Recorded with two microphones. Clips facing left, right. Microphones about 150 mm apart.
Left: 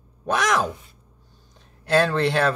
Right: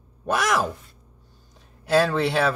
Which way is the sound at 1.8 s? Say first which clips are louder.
Even; 5° right (ahead or behind).